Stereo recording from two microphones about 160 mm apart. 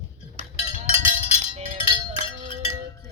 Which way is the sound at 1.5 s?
45° right (ahead or behind).